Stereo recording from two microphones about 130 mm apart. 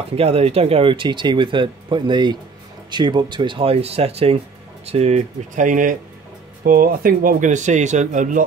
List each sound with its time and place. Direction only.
0.1 s speech: 50° right (ahead or behind); by 8.5 s 80° right